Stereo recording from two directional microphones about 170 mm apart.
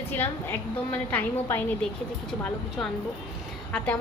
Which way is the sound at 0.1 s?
10° left (ahead or behind).